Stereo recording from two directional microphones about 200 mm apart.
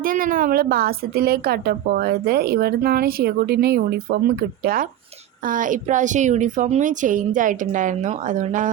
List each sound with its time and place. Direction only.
0.0 s a woman's voice: 45° right (ahead or behind)